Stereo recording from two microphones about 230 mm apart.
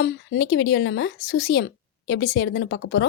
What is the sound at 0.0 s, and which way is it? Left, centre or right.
Speech, left.